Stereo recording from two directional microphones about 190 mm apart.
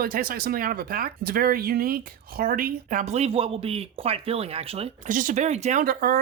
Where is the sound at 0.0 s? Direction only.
50° right (ahead or behind); by 5.1 s 30° right (ahead or behind).